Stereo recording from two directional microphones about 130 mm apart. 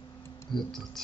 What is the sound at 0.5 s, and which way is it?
Speech, 35° left (ahead or behind).